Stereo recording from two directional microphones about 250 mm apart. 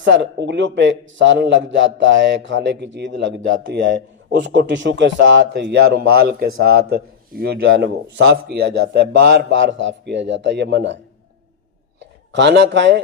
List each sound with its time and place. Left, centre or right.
0.0 s a man's voice: right
12.3 s a man's voice: right